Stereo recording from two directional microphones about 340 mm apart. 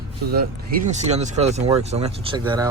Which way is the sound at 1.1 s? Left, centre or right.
Centre.